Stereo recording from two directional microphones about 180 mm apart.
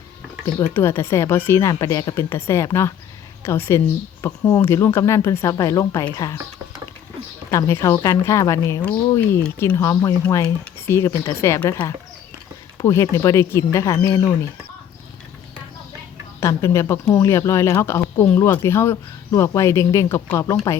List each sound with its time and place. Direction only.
0.7 s speech: 15° left (ahead or behind)
7.5 s speech: 15° left (ahead or behind)
16.4 s speech: 15° left (ahead or behind)